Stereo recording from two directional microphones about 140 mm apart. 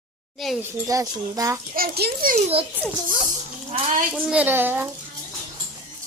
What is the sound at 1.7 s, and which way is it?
Speech, 90° right.